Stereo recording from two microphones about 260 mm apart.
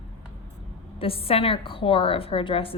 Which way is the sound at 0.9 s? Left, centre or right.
Left.